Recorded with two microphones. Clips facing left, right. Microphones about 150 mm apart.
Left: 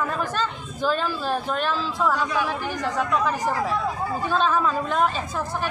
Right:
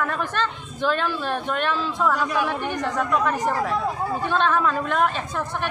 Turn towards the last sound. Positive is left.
turn(degrees=5)  # may be behind; listen again after turning